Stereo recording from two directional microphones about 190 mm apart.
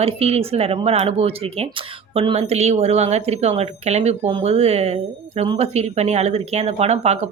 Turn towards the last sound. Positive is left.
turn(degrees=-35)  # may be behind; listen again after turning